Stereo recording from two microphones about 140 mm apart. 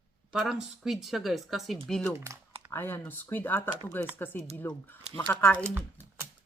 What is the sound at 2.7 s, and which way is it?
Speech, 15° left (ahead or behind).